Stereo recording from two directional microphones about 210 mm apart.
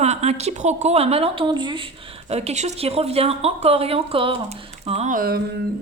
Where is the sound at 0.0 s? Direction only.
30° right (ahead or behind).